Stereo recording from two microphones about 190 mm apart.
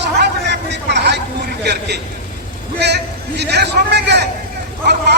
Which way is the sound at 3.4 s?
60° right (ahead or behind).